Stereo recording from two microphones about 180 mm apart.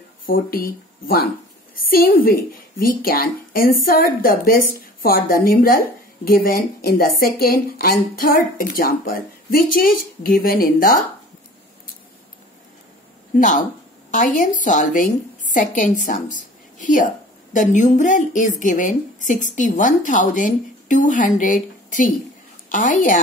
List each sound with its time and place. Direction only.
0.3 s a woman's voice: 55° left (ahead or behind)
13.4 s a woman's voice: 45° left (ahead or behind)